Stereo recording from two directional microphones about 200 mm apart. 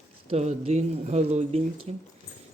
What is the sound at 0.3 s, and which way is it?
Speech, 30° right (ahead or behind).